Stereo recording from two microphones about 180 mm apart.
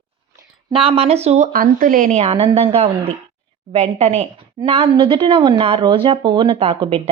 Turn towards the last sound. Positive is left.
turn(degrees=-30)  # may be behind; listen again after turning